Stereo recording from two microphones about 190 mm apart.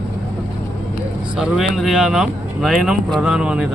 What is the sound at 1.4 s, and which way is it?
Speech, centre (ahead or behind).